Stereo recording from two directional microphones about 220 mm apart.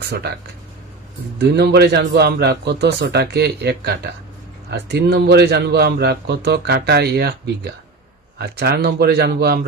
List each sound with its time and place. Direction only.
0.0 s speech: 45° right (ahead or behind)
1.4 s a man's voice: 50° right (ahead or behind)